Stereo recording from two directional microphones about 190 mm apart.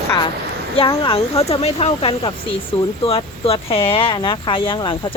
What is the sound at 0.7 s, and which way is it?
Speech, 30° left (ahead or behind).